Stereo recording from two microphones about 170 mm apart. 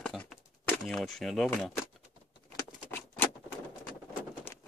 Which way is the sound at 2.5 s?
10° left (ahead or behind).